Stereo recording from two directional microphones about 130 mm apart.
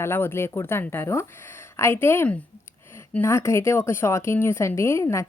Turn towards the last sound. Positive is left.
turn(degrees=20)  # may be behind; listen again after turning